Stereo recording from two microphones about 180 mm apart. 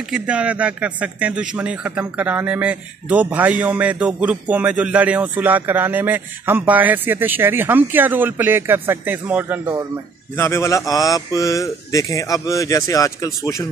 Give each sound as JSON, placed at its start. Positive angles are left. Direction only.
{"t": 0.1, "sound": "speech", "side_deg": -5}
{"t": 10.3, "sound": "a man's voice", "side_deg": 15}